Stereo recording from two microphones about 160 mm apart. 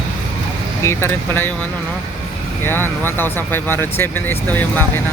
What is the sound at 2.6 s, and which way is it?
Speech, 15° left (ahead or behind).